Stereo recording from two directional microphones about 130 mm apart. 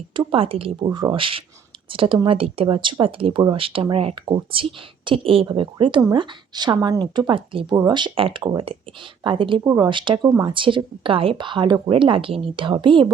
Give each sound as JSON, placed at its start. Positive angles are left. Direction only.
{"t": 0.1, "sound": "speech", "side_deg": -40}